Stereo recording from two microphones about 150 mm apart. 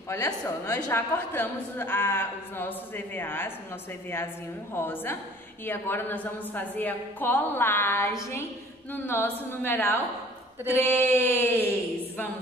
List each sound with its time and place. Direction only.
0.1 s a woman's voice: 20° left (ahead or behind)
4.7 s a woman's voice: 15° left (ahead or behind)